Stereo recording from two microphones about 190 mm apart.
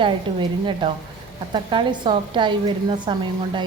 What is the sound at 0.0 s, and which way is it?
A woman's voice, 25° right (ahead or behind).